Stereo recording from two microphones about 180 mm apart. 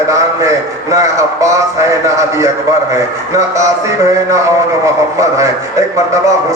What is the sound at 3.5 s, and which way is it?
A man's voice, 15° right (ahead or behind).